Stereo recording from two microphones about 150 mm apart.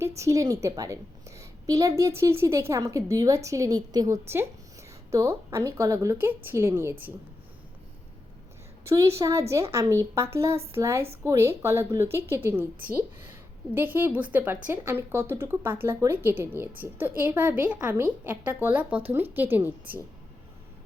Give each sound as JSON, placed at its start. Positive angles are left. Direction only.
{"t": 0.0, "sound": "a woman's voice", "side_deg": -20}
{"t": 1.4, "sound": "a sound", "side_deg": -20}
{"t": 2.0, "sound": "a woman's voice", "side_deg": -20}
{"t": 8.8, "sound": "a woman's voice", "side_deg": -20}